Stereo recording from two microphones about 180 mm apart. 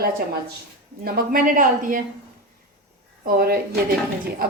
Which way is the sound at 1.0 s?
55° right (ahead or behind).